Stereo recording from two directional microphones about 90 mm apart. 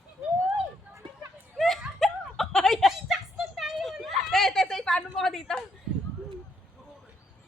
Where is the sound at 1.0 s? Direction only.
70° right (ahead or behind).